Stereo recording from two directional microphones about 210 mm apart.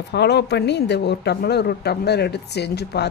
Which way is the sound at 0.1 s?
55° left (ahead or behind).